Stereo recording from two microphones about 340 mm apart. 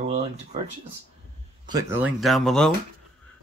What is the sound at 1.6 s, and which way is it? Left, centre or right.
Speech, centre.